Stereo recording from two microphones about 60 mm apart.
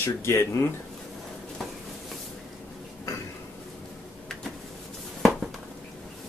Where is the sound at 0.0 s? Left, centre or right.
Left.